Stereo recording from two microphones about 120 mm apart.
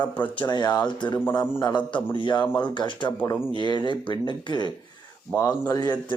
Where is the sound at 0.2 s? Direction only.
40° left (ahead or behind).